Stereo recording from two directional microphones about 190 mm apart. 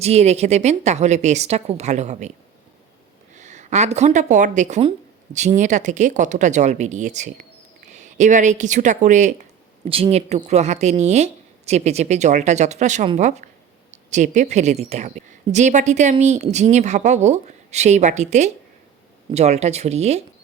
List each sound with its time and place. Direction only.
0.0 s a woman's voice: 35° right (ahead or behind)
3.3 s a woman's voice: 40° right (ahead or behind)